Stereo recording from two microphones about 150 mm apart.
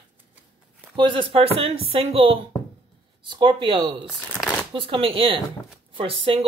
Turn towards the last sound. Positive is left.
turn(degrees=-35)  # may be behind; listen again after turning